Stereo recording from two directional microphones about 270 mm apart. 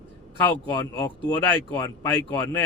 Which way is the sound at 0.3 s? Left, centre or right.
Centre.